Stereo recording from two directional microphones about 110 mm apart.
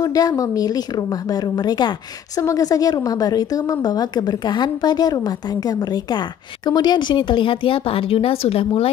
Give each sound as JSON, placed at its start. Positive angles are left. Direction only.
{"t": 0.0, "sound": "a woman's voice", "side_deg": 35}